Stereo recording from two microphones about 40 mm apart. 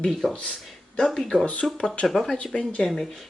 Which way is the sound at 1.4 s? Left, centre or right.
Left.